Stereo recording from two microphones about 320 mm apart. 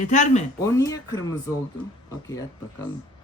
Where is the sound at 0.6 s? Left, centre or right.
Centre.